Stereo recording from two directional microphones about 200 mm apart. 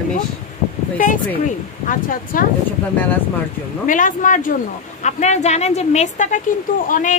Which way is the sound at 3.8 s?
40° left (ahead or behind).